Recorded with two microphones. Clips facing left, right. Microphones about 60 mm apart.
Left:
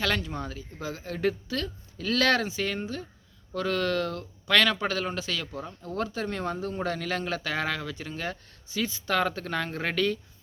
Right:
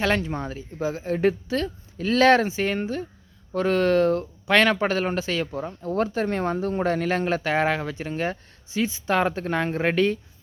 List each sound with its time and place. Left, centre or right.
0.0 s a woman's voice: right